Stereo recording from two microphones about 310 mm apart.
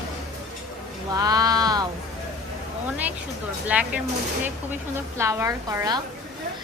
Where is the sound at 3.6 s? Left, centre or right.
Centre.